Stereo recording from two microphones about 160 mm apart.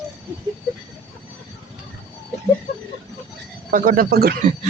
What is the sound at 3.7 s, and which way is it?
Speech, 65° right (ahead or behind).